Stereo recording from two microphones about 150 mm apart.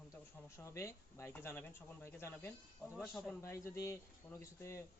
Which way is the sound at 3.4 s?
20° left (ahead or behind).